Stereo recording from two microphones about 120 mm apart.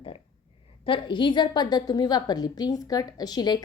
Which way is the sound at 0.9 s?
40° left (ahead or behind).